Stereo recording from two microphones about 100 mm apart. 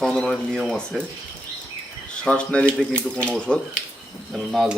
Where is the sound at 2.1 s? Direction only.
10° left (ahead or behind).